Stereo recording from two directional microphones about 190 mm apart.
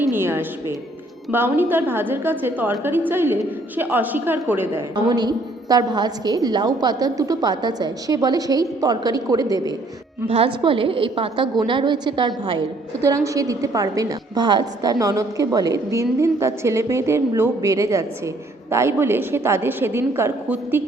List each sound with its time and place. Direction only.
0.1 s a woman's voice: 10° right (ahead or behind)
4.9 s a woman's voice: 20° right (ahead or behind)
10.2 s a woman's voice: 30° right (ahead or behind); by 20.8 s 10° right (ahead or behind)